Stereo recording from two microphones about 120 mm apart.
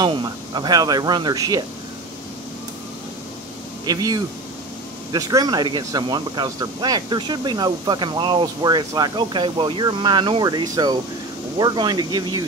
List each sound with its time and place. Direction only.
0.0 s speech: 40° right (ahead or behind)
3.8 s speech: 35° right (ahead or behind)